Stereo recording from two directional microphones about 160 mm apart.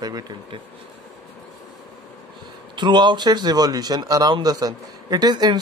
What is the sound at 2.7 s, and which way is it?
Speech, 30° right (ahead or behind).